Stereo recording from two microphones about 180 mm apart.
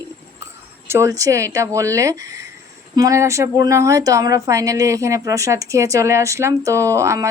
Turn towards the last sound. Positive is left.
turn(degrees=-15)  # may be behind; listen again after turning